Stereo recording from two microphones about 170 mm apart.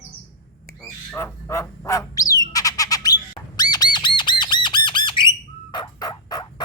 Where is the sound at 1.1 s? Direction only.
15° left (ahead or behind).